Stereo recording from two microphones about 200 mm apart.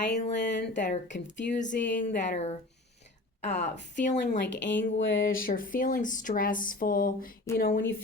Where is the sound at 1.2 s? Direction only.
65° left (ahead or behind).